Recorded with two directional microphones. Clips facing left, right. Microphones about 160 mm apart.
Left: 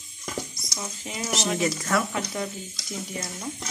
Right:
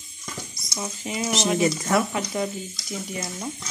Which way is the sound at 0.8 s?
10° right (ahead or behind).